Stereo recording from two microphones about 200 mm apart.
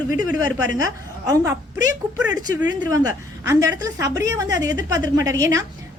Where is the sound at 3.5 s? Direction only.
15° right (ahead or behind).